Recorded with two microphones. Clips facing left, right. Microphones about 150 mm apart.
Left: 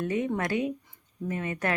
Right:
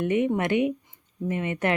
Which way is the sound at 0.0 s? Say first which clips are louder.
Right 5 dB; 20° right (ahead or behind).